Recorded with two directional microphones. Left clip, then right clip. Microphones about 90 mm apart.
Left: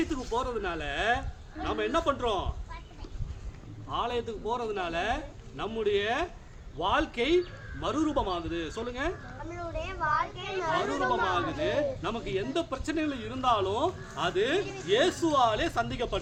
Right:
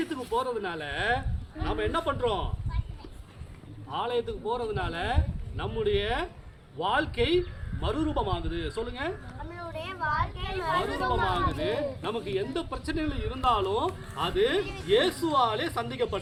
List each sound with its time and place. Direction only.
0.0 s a man's voice: 30° left (ahead or behind)
3.9 s a man's voice: 35° left (ahead or behind)
9.5 s a child's voice: 15° right (ahead or behind)
10.0 s a child's voice: 10° right (ahead or behind)
11.6 s a man's voice: 35° left (ahead or behind)